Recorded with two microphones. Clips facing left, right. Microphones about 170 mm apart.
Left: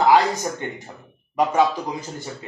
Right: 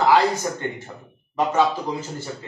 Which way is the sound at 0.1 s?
15° left (ahead or behind).